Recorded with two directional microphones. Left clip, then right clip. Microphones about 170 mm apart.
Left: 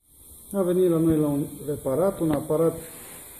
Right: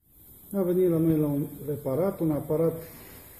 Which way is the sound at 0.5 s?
5° left (ahead or behind).